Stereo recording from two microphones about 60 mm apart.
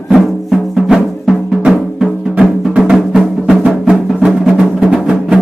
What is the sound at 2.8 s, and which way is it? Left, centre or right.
Music, centre.